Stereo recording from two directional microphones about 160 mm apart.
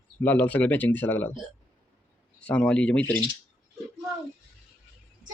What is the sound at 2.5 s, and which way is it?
Speech, 5° left (ahead or behind).